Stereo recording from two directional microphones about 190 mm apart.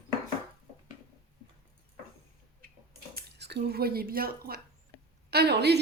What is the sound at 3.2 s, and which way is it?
Speech, 60° right (ahead or behind).